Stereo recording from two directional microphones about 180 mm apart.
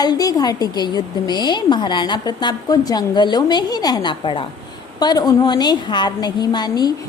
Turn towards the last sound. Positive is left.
turn(degrees=20)  # may be behind; listen again after turning